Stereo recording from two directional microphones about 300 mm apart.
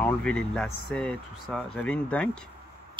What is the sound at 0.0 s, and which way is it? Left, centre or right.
Speech, centre.